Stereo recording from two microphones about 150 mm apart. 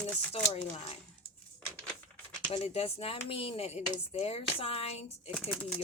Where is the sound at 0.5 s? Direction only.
45° left (ahead or behind).